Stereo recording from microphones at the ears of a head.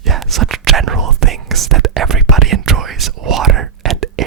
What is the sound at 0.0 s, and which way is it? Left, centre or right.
Whispering, right.